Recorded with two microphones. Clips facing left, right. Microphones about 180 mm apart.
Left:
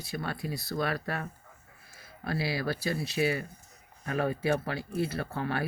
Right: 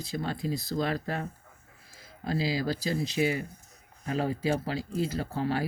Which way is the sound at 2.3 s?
20° right (ahead or behind).